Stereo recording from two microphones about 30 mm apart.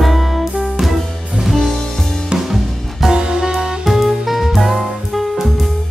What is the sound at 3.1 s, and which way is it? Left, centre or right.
Music, right.